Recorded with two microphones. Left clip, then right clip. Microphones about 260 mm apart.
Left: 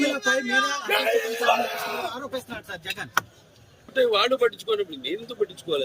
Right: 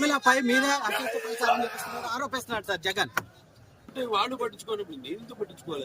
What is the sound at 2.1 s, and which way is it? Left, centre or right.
Speech, right.